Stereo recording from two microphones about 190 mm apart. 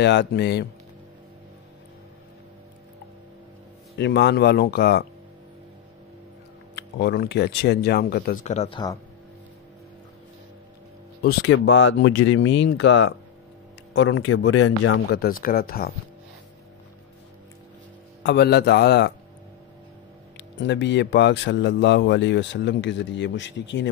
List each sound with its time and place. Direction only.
0.0 s speech: 65° left (ahead or behind)
4.0 s speech: 65° left (ahead or behind)
6.7 s speech: 60° left (ahead or behind)
8.5 s speech: 35° left (ahead or behind)
11.2 s a man's voice: 80° left
15.1 s speech: 50° left (ahead or behind)
18.2 s speech: 60° left (ahead or behind)
20.3 s speech: 70° left (ahead or behind)